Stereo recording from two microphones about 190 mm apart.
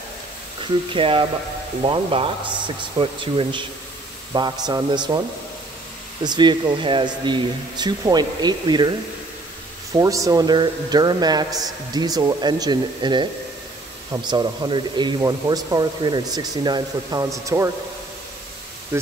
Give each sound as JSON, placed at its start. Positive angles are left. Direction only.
{"t": 0.9, "sound": "a man's voice", "side_deg": -30}
{"t": 6.2, "sound": "a man's voice", "side_deg": -25}
{"t": 9.9, "sound": "a man's voice", "side_deg": -20}